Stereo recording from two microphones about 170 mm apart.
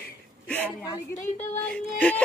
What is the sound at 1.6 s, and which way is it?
Speech, 5° left (ahead or behind).